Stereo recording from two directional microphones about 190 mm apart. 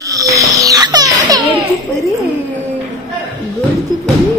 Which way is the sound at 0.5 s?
20° right (ahead or behind).